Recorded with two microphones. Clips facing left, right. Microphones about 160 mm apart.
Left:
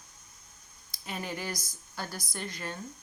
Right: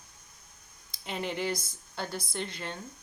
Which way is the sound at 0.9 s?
25° right (ahead or behind).